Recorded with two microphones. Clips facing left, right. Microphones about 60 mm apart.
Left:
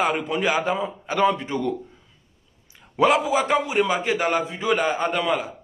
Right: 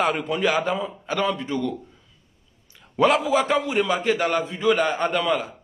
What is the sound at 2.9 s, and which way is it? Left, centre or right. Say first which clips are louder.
A man's voice: even; centre.